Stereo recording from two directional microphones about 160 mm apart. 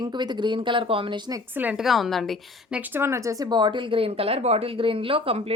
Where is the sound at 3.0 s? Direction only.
15° right (ahead or behind).